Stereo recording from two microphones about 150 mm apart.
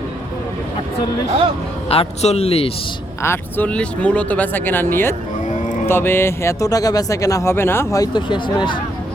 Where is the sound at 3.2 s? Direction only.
15° left (ahead or behind).